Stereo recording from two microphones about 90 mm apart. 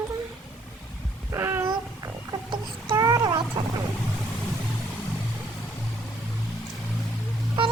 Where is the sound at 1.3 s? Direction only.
25° right (ahead or behind).